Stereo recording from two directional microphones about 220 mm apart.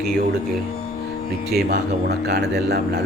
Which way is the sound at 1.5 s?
45° right (ahead or behind).